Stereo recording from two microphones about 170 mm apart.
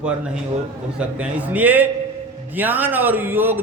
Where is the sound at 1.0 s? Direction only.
10° right (ahead or behind).